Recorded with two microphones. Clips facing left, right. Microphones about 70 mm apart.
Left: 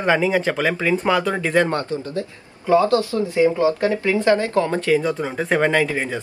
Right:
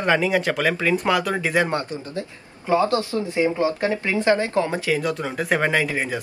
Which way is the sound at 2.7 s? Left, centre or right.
Right.